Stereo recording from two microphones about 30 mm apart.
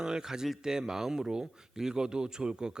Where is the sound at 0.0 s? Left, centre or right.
Right.